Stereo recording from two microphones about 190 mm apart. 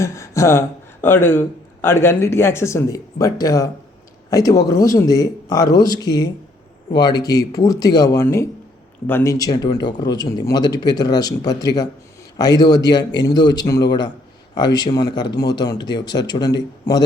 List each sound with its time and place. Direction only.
0.0 s a man's voice: 15° left (ahead or behind)